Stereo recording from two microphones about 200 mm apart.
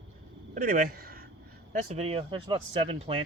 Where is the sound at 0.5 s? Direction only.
45° right (ahead or behind).